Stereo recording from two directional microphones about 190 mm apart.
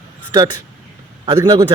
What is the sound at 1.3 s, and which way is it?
Speech, 20° right (ahead or behind).